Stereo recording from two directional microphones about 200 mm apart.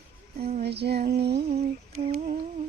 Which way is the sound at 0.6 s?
55° right (ahead or behind).